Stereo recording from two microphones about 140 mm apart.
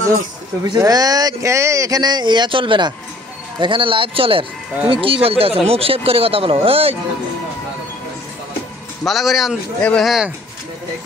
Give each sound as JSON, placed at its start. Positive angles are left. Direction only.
{"t": 0.7, "sound": "speech", "side_deg": -25}
{"t": 9.0, "sound": "speech", "side_deg": 0}
{"t": 9.8, "sound": "speech", "side_deg": 10}
{"t": 10.0, "sound": "speech", "side_deg": -5}